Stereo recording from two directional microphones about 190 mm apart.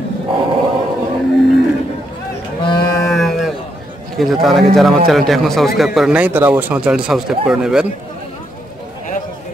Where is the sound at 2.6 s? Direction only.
20° left (ahead or behind).